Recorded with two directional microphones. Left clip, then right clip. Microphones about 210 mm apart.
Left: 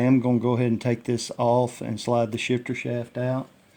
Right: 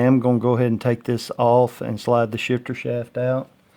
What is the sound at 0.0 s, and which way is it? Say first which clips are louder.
Speech: right 4 dB; 35° right (ahead or behind).